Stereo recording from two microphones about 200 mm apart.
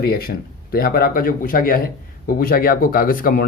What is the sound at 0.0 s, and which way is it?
Speech, 50° left (ahead or behind).